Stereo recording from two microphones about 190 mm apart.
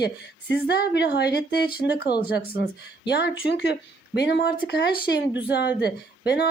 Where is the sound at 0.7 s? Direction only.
60° left (ahead or behind).